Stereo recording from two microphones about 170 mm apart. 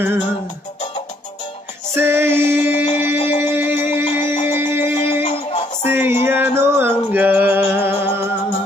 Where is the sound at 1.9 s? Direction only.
15° right (ahead or behind).